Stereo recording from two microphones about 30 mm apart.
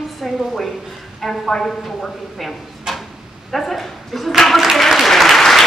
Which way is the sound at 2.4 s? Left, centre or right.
Centre.